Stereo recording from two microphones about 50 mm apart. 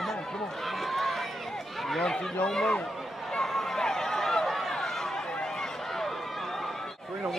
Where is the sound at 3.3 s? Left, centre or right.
Centre.